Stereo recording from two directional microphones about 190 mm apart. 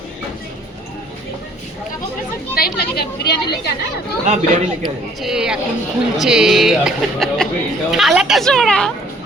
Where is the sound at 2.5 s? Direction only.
55° left (ahead or behind).